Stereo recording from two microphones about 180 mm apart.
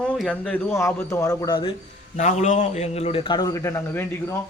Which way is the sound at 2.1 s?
40° left (ahead or behind).